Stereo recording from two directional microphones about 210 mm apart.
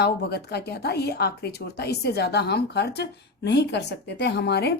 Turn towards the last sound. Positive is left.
turn(degrees=50)  # may be behind; listen again after turning